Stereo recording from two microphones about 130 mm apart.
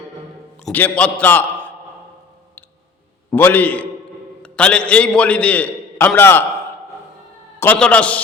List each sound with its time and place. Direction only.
0.7 s a man's voice: 10° left (ahead or behind)
3.3 s a man's voice: 15° left (ahead or behind)
7.6 s a man's voice: 10° left (ahead or behind)